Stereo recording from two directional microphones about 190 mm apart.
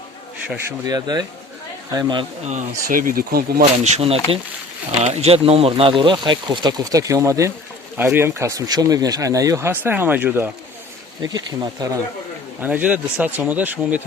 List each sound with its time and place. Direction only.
0.9 s speech: 20° right (ahead or behind)
2.5 s speech: 45° right (ahead or behind)
3.6 s speech: 35° right (ahead or behind); by 10.5 s 10° right (ahead or behind)
11.2 s speech: 20° right (ahead or behind)
12.5 s speech: 10° right (ahead or behind)